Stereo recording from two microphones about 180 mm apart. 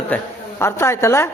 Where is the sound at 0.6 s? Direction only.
15° left (ahead or behind).